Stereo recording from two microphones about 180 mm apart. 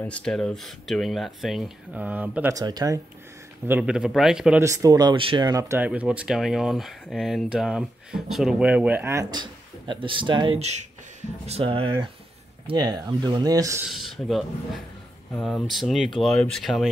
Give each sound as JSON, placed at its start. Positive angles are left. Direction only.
{"t": 0.0, "sound": "speech", "side_deg": 5}
{"t": 2.5, "sound": "speech", "side_deg": -20}
{"t": 3.6, "sound": "speech", "side_deg": -10}
{"t": 4.6, "sound": "speech", "side_deg": -20}
{"t": 5.9, "sound": "speech", "side_deg": -5}
{"t": 13.8, "sound": "speech", "side_deg": 0}